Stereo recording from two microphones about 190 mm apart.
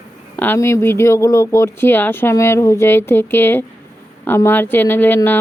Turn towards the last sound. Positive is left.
turn(degrees=10)  # may be behind; listen again after turning